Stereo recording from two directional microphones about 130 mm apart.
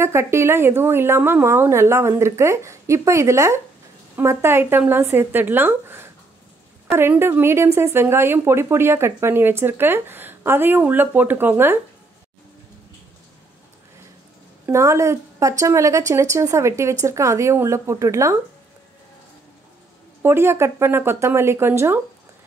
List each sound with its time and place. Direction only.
0.0 s a woman's voice: 20° right (ahead or behind)
14.7 s a woman's voice: 25° right (ahead or behind)
20.2 s a woman's voice: 20° right (ahead or behind)